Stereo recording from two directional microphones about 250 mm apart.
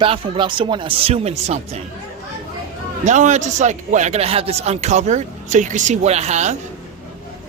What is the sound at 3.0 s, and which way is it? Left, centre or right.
Speech, right.